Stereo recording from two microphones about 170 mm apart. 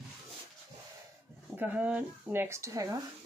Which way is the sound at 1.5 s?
10° right (ahead or behind).